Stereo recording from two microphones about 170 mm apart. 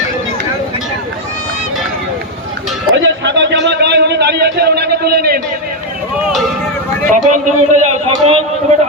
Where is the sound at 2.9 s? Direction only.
90° right; by 5.4 s 70° right (ahead or behind).